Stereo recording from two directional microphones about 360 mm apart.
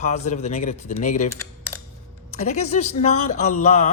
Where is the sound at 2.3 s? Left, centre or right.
Centre.